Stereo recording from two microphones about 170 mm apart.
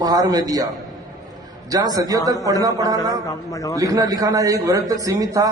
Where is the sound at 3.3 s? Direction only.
20° left (ahead or behind).